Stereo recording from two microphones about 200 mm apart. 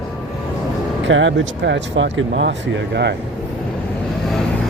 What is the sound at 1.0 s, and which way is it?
Speech, 70° right (ahead or behind).